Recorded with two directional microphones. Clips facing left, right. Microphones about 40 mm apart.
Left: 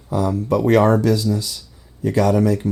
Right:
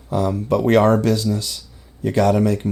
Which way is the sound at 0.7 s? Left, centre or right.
Right.